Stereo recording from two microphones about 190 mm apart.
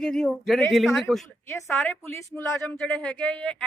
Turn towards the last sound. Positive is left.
turn(degrees=5)  # may be behind; listen again after turning